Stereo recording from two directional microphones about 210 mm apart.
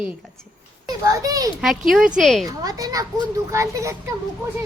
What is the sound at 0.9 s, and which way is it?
Speech, 15° right (ahead or behind).